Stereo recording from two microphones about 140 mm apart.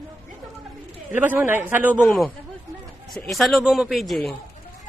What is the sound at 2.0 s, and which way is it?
A man's voice, centre (ahead or behind).